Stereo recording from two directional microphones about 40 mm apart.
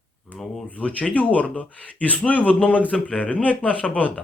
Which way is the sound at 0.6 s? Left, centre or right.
Left.